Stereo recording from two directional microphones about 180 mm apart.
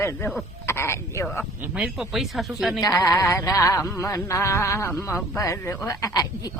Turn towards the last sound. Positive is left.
turn(degrees=20)  # may be behind; listen again after turning